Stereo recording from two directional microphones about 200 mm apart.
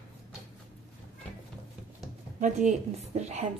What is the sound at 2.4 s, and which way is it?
Speech, 40° right (ahead or behind).